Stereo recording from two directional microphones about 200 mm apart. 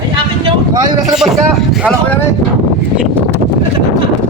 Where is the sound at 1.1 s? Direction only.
Centre (ahead or behind).